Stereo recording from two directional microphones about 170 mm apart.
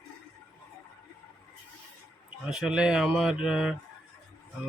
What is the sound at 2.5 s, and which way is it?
Speech, 5° right (ahead or behind).